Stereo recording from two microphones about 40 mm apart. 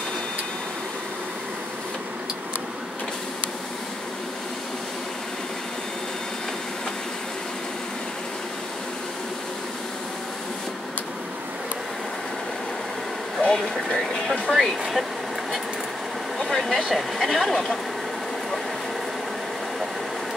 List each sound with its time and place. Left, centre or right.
13.4 s a sound: centre
13.8 s speech: centre
16.3 s speech: centre